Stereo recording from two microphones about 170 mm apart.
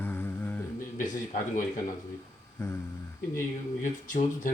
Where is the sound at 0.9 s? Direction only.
50° left (ahead or behind).